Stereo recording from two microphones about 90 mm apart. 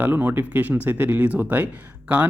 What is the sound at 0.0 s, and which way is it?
Speech, 20° right (ahead or behind).